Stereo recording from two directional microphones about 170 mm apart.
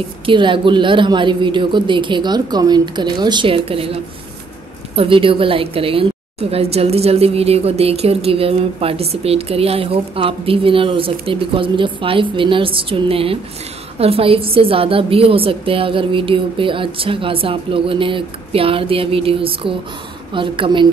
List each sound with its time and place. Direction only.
0.3 s a woman's voice: 30° right (ahead or behind)